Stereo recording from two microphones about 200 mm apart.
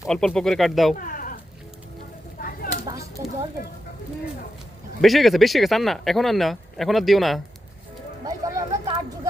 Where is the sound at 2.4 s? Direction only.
45° left (ahead or behind).